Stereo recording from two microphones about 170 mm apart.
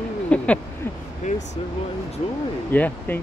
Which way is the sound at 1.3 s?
50° left (ahead or behind).